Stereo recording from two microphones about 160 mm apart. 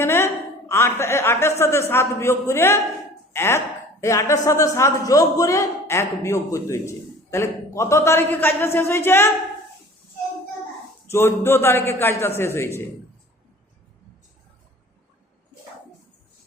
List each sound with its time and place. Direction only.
0.0 s a sound: 15° left (ahead or behind)
0.7 s a man's voice: 15° left (ahead or behind)
11.0 s a man's voice: 15° left (ahead or behind)